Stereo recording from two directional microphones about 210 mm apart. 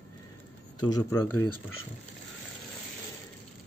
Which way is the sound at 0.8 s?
20° left (ahead or behind).